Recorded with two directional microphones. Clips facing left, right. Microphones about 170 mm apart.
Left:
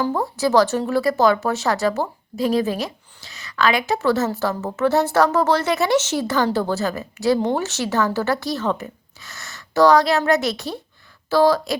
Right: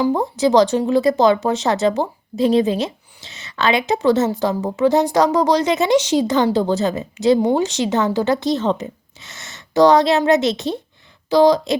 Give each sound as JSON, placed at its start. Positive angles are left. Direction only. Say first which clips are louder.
{"t": 0.0, "sound": "speech", "louder": "right 4 dB", "side_deg": -20}